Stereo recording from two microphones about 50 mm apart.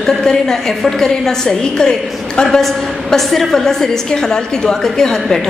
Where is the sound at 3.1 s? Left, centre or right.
Centre.